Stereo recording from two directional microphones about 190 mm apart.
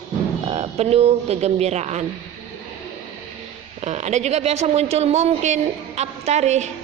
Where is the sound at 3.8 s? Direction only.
40° right (ahead or behind).